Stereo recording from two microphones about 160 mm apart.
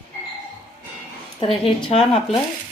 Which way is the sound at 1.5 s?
35° left (ahead or behind).